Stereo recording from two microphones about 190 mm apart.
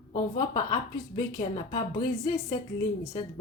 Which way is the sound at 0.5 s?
40° left (ahead or behind).